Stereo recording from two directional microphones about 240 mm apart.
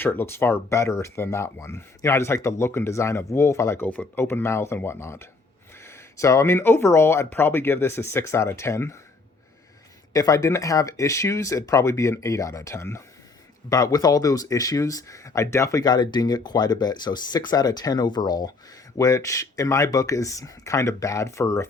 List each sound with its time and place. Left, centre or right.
0.0 s speech: centre
10.1 s speech: centre